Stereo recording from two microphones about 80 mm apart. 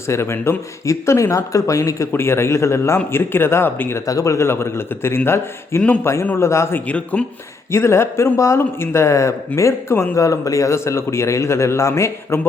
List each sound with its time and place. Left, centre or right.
0.1 s a man's voice: left
2.1 s a man's voice: left
4.0 s a man's voice: left
6.7 s a man's voice: centre
7.7 s a man's voice: left